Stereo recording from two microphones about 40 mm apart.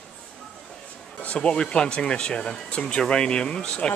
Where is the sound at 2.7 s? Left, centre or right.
Left.